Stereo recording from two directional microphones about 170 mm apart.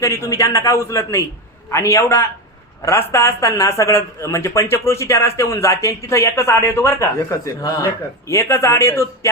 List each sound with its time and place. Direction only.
0.0 s speech: 20° left (ahead or behind)